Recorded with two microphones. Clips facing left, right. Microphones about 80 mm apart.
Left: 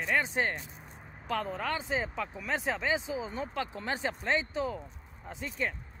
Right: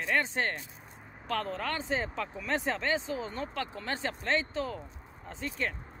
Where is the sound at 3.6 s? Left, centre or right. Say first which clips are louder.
Left 3 dB; centre.